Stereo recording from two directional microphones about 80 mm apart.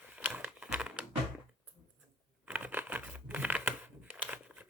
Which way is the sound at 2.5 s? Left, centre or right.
Right.